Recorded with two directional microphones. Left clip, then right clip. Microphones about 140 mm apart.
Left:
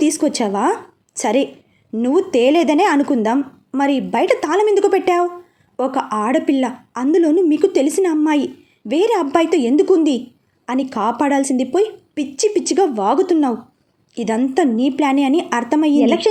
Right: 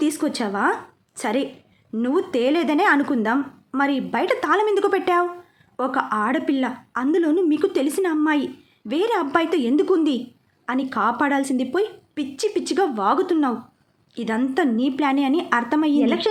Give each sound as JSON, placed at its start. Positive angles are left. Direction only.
{"t": 0.0, "sound": "a woman's voice", "side_deg": 20}